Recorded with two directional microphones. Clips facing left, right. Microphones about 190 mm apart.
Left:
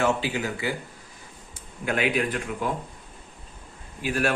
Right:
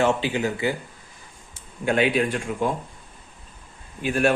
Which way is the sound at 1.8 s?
25° right (ahead or behind).